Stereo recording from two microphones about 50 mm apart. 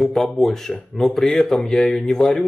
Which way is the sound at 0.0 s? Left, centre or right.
Centre.